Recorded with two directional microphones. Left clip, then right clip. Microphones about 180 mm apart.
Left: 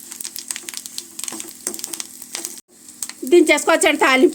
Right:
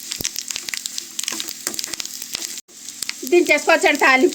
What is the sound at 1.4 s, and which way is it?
Frying, 10° right (ahead or behind).